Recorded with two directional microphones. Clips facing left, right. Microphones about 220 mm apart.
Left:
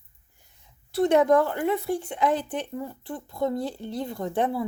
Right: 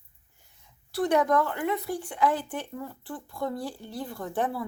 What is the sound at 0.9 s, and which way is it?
Speech, 25° left (ahead or behind).